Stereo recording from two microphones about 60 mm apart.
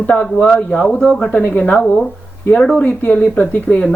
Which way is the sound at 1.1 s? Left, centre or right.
Centre.